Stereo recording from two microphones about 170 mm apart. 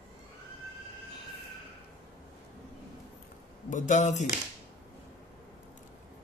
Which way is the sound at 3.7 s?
45° left (ahead or behind).